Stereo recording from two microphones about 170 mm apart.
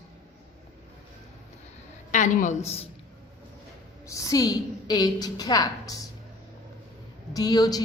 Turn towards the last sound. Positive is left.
turn(degrees=20)  # may be behind; listen again after turning